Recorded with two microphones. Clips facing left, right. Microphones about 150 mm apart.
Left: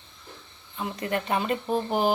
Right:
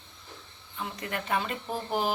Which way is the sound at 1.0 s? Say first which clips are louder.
Left 4 dB; 25° left (ahead or behind).